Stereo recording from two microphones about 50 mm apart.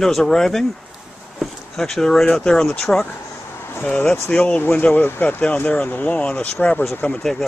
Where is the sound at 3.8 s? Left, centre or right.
Left.